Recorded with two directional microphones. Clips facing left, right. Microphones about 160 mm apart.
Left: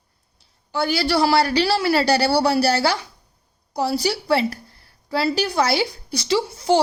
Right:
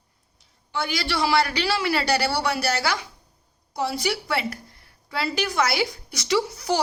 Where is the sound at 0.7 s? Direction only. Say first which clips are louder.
Left 7 dB; 35° left (ahead or behind).